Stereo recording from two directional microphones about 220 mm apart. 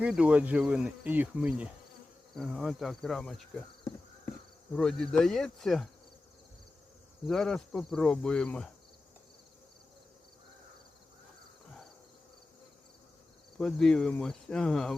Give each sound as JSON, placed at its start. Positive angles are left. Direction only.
{"t": 0.0, "sound": "speech", "side_deg": -5}
{"t": 4.7, "sound": "speech", "side_deg": 5}
{"t": 7.3, "sound": "speech", "side_deg": 0}
{"t": 13.6, "sound": "speech", "side_deg": 5}